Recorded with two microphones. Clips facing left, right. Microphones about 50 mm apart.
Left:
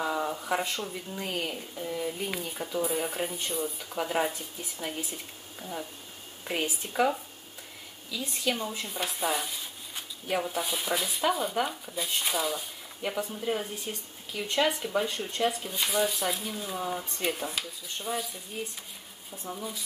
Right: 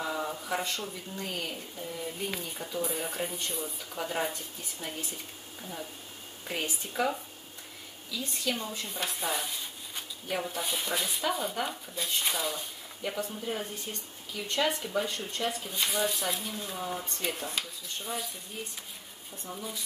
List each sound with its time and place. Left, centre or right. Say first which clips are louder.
0.0 s speech: left 3 dB; centre
1.2 s speech: left 3 dB; left; by 18.4 s centre
19.5 s speech: left 1 dB; centre